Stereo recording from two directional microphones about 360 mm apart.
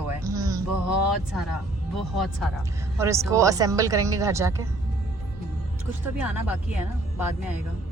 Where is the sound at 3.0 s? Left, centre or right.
Centre.